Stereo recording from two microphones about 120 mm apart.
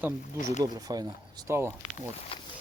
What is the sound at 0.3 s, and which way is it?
Speech, 90° left.